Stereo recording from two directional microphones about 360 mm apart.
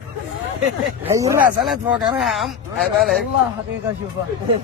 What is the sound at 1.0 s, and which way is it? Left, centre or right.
Speech, centre.